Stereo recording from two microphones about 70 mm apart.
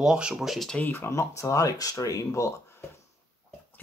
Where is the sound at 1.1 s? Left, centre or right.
Left.